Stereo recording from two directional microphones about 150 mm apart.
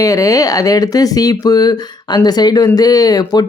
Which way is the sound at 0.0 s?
20° left (ahead or behind).